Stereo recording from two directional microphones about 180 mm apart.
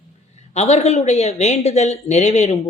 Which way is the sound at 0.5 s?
35° left (ahead or behind).